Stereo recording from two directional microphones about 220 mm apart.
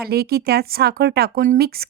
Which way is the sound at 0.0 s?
45° right (ahead or behind).